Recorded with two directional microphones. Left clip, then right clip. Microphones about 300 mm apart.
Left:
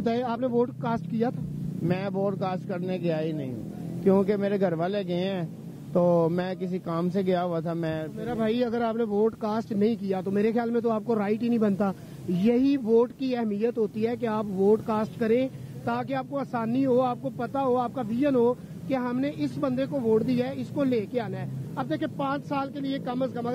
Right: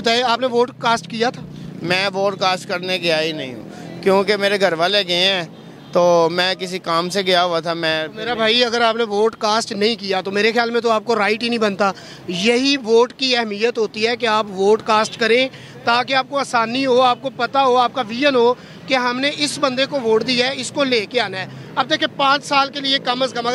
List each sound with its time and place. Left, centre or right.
0.0 s speech: centre
19.9 s speech: centre
20.2 s speech: centre